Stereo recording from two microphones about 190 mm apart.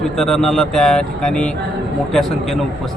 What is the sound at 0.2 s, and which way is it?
A man's voice, centre (ahead or behind).